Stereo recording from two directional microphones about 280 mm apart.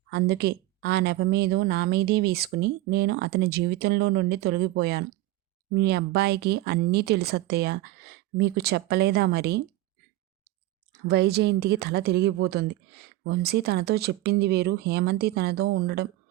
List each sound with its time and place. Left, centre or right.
0.1 s a woman's voice: right
11.0 s a woman's voice: right